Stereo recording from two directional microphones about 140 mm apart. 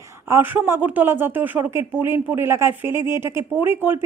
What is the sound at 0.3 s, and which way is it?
Speech, 15° right (ahead or behind).